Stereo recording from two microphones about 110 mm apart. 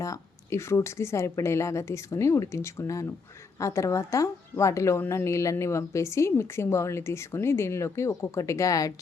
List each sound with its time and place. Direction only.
0.0 s a woman's voice: 30° left (ahead or behind)